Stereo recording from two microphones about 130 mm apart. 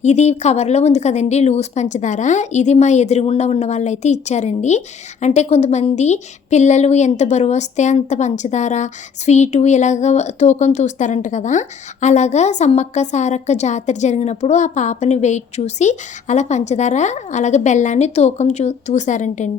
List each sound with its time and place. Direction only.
0.0 s a woman's voice: 60° left (ahead or behind)